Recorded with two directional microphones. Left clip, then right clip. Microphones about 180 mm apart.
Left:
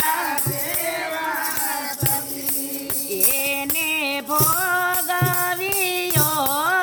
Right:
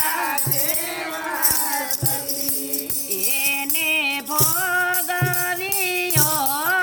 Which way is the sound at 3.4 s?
20° left (ahead or behind).